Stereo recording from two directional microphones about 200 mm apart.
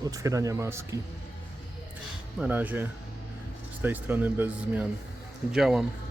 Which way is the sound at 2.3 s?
10° right (ahead or behind).